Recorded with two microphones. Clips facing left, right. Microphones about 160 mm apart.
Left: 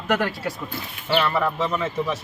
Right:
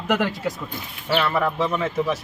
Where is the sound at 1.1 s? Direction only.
5° right (ahead or behind).